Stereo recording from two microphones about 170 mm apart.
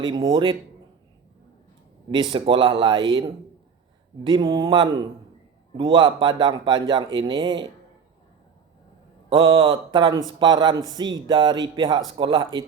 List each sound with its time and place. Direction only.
0.0 s speech: 25° right (ahead or behind)
2.0 s speech: 30° right (ahead or behind)
9.3 s speech: 25° right (ahead or behind)